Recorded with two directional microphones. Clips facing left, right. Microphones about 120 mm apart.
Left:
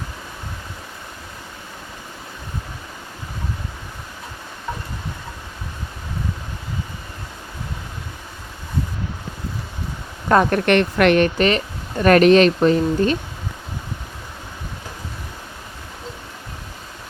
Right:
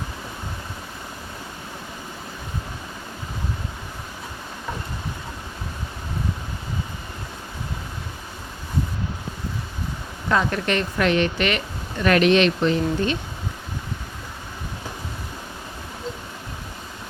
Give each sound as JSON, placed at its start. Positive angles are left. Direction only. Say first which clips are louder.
{"t": 10.2, "sound": "a woman's voice", "louder": "left 6 dB", "side_deg": 50}
{"t": 11.3, "sound": "speech", "louder": "left 5 dB", "side_deg": 35}